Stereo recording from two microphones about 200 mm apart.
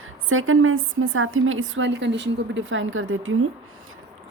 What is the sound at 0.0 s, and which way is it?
A woman's voice, 90° right.